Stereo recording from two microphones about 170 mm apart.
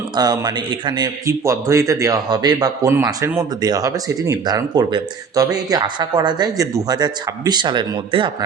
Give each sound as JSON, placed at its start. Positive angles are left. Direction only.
{"t": 0.2, "sound": "a man's voice", "side_deg": -25}